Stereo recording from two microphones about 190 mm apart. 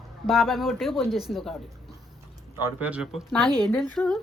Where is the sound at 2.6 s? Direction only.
5° right (ahead or behind).